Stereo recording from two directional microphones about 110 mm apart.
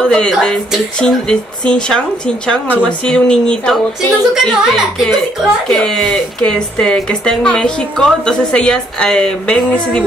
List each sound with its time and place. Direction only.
0.0 s a woman's voice: 5° left (ahead or behind)
4.3 s a woman's voice: 5° right (ahead or behind)